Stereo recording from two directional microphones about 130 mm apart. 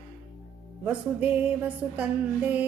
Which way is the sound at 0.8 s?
10° right (ahead or behind).